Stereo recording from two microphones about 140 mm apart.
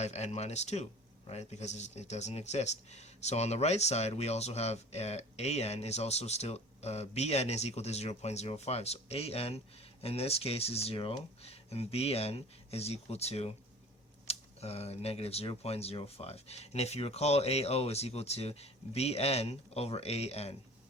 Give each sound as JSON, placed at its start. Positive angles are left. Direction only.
{"t": 0.0, "sound": "speech", "side_deg": 50}